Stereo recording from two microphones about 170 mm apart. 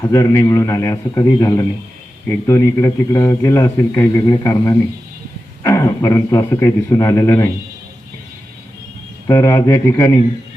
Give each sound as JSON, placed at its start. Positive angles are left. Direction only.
{"t": 0.0, "sound": "a man's voice", "side_deg": 20}
{"t": 9.2, "sound": "speech", "side_deg": 20}